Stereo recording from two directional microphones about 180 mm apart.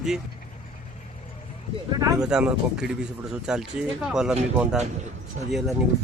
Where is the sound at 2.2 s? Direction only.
5° right (ahead or behind).